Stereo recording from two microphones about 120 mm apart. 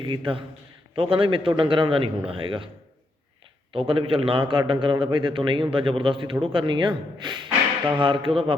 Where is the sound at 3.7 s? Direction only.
50° right (ahead or behind).